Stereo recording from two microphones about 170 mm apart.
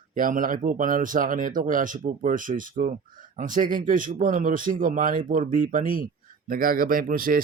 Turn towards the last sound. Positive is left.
turn(degrees=-55)  # may be behind; listen again after turning